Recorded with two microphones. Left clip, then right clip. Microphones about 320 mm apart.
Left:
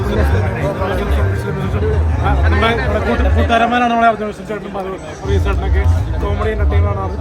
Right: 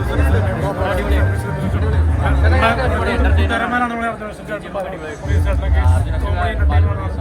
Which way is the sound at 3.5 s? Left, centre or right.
Left.